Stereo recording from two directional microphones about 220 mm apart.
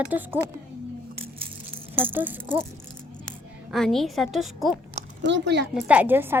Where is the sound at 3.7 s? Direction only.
Centre (ahead or behind).